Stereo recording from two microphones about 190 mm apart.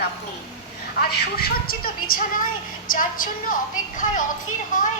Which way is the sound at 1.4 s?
50° left (ahead or behind).